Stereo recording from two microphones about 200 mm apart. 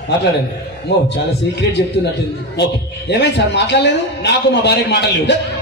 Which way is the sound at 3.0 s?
55° left (ahead or behind).